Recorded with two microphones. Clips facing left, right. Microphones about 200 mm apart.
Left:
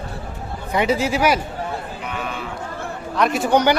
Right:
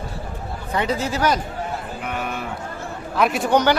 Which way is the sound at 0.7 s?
10° left (ahead or behind).